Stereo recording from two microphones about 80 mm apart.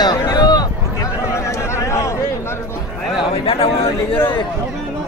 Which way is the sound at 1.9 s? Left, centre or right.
Left.